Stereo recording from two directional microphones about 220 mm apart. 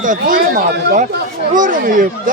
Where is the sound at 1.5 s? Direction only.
35° right (ahead or behind).